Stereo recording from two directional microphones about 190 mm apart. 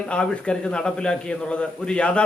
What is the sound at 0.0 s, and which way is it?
A man's voice, 5° left (ahead or behind).